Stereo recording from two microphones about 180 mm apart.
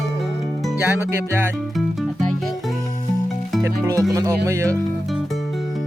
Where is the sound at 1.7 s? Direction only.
Centre (ahead or behind).